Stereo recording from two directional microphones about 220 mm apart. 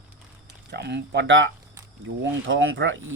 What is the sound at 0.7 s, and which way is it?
Speech, 50° right (ahead or behind).